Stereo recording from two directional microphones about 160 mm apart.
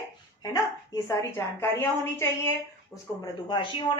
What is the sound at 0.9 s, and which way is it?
Speech, 15° left (ahead or behind).